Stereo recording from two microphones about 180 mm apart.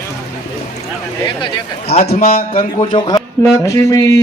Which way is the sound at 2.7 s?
25° left (ahead or behind).